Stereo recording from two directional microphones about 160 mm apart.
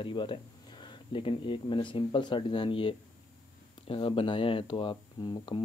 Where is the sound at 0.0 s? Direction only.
30° left (ahead or behind).